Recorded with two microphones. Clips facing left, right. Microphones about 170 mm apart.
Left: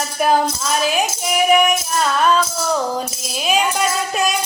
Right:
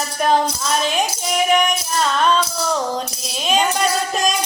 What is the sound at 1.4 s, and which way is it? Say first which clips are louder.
Music: left 4 dB; 5° left (ahead or behind).